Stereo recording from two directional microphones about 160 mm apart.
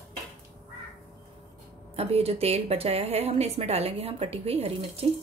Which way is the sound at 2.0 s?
40° right (ahead or behind).